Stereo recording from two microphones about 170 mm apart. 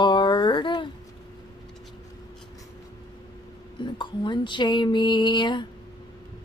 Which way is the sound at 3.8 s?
25° left (ahead or behind).